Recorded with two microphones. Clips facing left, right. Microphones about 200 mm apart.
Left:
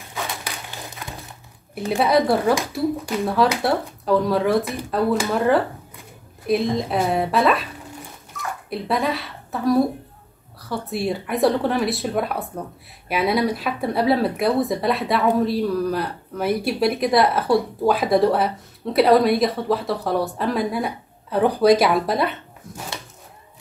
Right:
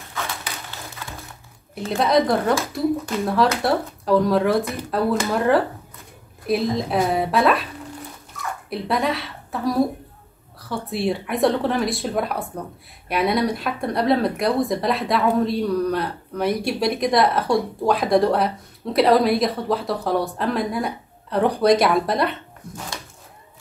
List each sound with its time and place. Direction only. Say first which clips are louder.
0.1 s a sound: left 1 dB; 15° left (ahead or behind)
1.9 s speech: left 1 dB; 5° left (ahead or behind)
8.6 s a woman's voice: even; centre (ahead or behind)